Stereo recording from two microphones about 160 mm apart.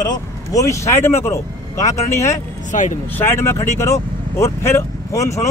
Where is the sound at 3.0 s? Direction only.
15° left (ahead or behind).